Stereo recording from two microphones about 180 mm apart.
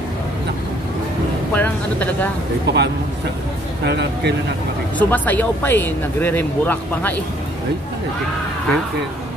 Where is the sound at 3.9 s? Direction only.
65° right (ahead or behind).